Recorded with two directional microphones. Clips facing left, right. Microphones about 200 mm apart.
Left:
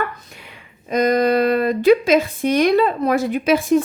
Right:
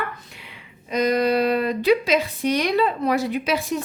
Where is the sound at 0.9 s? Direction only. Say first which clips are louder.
Left 4 dB; 50° left (ahead or behind).